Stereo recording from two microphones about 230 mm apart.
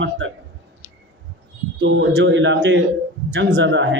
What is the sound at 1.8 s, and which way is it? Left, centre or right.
Speech, right.